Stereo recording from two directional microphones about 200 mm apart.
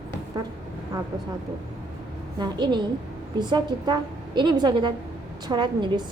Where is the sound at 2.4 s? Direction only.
20° right (ahead or behind).